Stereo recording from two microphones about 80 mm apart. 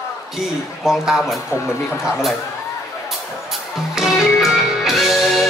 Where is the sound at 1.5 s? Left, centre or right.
Left.